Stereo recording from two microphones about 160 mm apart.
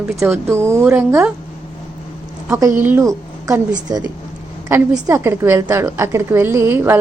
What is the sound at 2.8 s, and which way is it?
A woman's voice, 15° right (ahead or behind).